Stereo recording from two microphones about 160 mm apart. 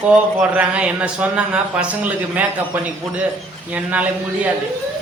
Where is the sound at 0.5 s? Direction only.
10° right (ahead or behind).